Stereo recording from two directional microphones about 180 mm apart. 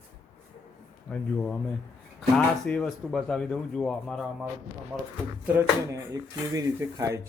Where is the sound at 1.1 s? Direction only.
5° left (ahead or behind).